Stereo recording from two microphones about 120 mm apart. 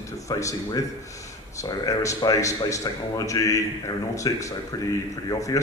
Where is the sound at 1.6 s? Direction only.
25° left (ahead or behind).